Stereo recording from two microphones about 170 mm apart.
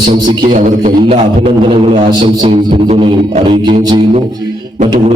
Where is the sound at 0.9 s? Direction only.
35° right (ahead or behind).